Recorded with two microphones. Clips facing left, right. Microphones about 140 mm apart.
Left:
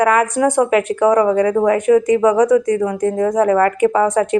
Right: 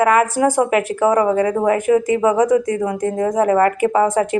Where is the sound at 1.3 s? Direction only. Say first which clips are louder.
Left 2 dB; 25° right (ahead or behind).